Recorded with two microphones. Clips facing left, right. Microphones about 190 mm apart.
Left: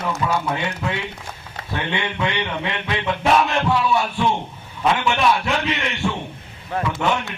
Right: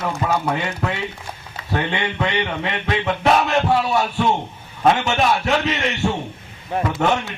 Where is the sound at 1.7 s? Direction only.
45° right (ahead or behind).